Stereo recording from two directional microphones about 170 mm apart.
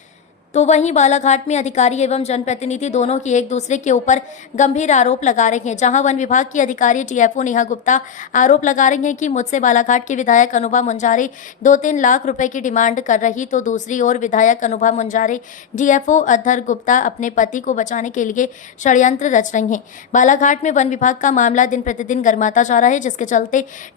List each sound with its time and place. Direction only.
0.5 s a woman's voice: 40° left (ahead or behind)